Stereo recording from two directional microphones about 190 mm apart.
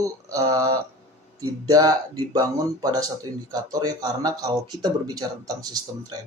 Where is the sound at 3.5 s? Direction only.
20° right (ahead or behind).